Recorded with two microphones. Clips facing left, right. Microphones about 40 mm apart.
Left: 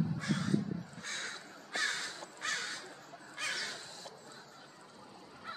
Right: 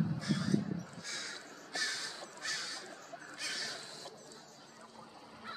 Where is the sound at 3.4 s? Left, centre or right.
Left.